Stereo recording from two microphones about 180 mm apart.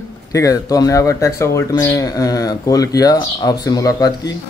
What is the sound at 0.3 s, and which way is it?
Speech, 20° left (ahead or behind).